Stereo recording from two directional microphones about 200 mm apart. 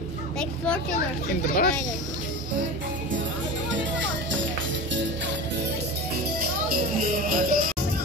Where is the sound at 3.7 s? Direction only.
70° right (ahead or behind).